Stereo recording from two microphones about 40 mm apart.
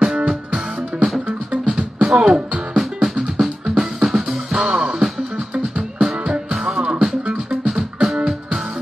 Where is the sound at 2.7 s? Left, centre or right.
Centre.